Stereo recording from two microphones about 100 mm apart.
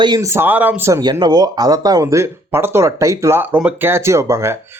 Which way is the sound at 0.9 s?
35° right (ahead or behind).